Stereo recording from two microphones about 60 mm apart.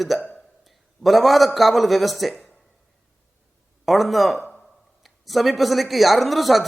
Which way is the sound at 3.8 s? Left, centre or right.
Centre.